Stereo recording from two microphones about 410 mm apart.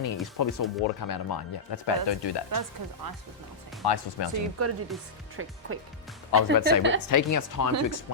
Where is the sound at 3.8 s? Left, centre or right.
Left.